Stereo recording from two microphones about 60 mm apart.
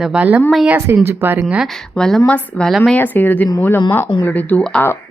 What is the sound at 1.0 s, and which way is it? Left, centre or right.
Speech, right.